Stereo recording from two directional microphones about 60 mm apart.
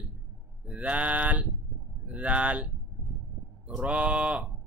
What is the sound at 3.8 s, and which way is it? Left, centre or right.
Speech, right.